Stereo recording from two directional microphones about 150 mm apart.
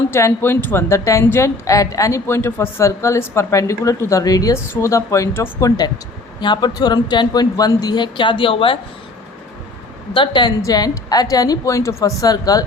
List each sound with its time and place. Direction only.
0.1 s a woman's voice: 15° left (ahead or behind); by 8.8 s 35° left (ahead or behind)
10.2 s a woman's voice: 30° left (ahead or behind)